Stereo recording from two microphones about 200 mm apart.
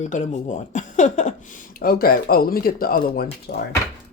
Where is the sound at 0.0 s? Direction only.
40° left (ahead or behind).